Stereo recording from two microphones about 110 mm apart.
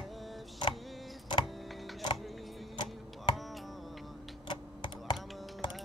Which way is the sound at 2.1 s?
Centre (ahead or behind).